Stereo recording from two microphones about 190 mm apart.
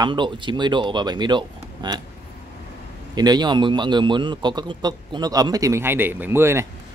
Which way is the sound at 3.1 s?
20° right (ahead or behind).